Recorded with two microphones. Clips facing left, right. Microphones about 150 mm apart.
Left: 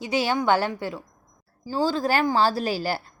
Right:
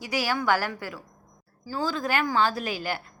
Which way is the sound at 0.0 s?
25° left (ahead or behind).